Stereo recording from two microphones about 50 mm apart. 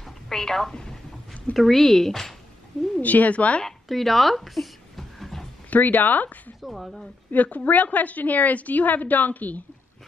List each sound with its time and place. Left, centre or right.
0.0 s a sound: centre
1.5 s speech: centre
3.0 s speech: left
3.6 s a sound: centre
5.7 s speech: left
6.6 s speech: centre
7.2 s a woman's voice: left